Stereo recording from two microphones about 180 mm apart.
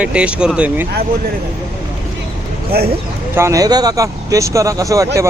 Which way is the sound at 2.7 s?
60° right (ahead or behind).